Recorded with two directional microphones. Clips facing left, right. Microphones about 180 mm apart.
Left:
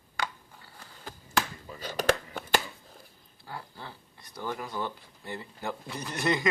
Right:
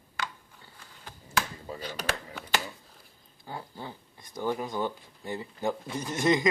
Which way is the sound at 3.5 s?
20° right (ahead or behind).